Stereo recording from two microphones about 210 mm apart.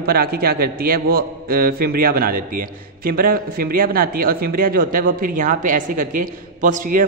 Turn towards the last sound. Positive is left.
turn(degrees=-40)  # may be behind; listen again after turning